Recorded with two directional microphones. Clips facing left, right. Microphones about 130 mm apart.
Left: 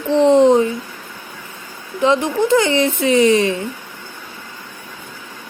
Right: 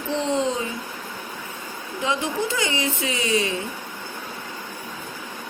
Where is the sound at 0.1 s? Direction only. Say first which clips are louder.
Left 13 dB; 65° left (ahead or behind).